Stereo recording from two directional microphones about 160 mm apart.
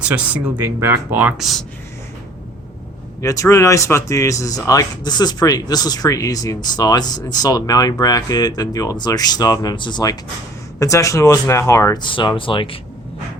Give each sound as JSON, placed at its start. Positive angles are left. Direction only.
{"t": 0.0, "sound": "speech", "side_deg": -10}
{"t": 3.2, "sound": "speech", "side_deg": 20}
{"t": 12.0, "sound": "speech", "side_deg": 30}